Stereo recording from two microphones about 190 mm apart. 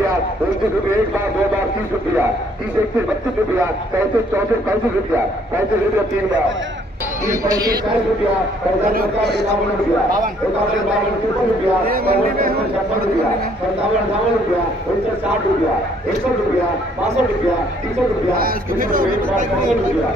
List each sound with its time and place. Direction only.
7.2 s speech: 20° right (ahead or behind)
8.9 s speech: 60° right (ahead or behind)
11.9 s speech: 50° right (ahead or behind)
18.4 s speech: 50° right (ahead or behind)